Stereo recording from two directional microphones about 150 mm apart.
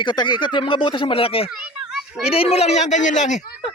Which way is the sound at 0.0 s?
30° left (ahead or behind).